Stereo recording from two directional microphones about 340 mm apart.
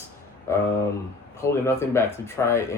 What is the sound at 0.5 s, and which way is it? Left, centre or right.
Speech, centre.